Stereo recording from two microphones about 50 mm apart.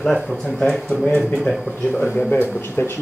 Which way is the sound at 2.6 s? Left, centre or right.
Left.